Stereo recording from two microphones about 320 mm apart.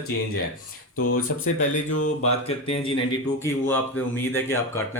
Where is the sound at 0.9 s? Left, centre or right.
Left.